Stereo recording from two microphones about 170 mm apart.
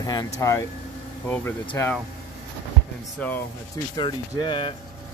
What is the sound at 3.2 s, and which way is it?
Speech, 10° left (ahead or behind).